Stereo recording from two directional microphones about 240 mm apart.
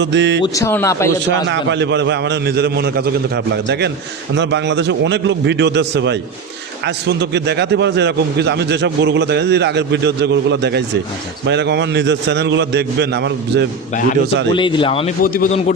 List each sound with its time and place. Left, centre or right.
0.0 s a man's voice: right
0.4 s speech: centre
1.5 s a man's voice: right
14.5 s speech: centre
15.2 s a man's voice: left